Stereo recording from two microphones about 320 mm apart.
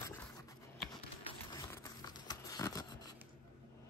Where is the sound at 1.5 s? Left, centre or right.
Centre.